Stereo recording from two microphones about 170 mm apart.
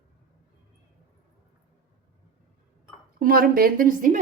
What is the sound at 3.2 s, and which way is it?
A woman's voice, 55° right (ahead or behind).